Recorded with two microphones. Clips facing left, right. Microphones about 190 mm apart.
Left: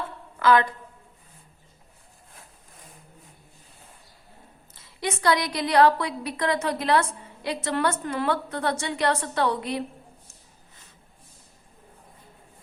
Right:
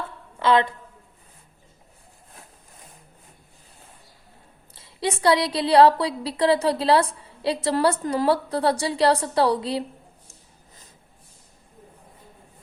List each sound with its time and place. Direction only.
0.3 s a woman's voice: 25° right (ahead or behind)
4.7 s a woman's voice: 30° right (ahead or behind)